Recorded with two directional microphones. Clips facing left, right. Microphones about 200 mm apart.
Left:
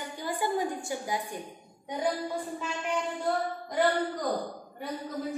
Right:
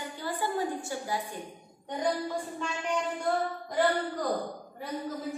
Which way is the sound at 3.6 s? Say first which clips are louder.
Left 1 dB; centre (ahead or behind).